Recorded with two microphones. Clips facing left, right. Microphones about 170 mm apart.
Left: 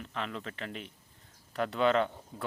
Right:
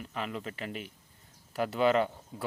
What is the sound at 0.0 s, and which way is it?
Speech, 5° right (ahead or behind).